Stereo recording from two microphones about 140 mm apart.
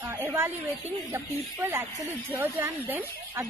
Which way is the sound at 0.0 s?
20° right (ahead or behind).